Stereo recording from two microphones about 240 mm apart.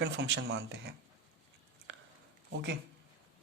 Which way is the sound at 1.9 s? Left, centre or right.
Right.